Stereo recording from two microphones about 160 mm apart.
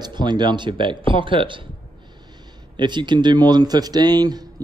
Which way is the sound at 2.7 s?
30° right (ahead or behind).